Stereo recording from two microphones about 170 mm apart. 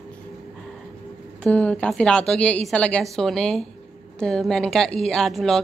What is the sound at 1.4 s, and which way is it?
A woman's voice, 10° left (ahead or behind).